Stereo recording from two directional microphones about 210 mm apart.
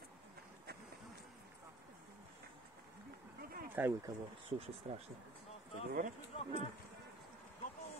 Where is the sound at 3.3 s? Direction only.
45° right (ahead or behind).